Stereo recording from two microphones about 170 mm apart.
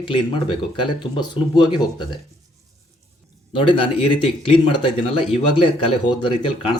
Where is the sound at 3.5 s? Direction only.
30° left (ahead or behind).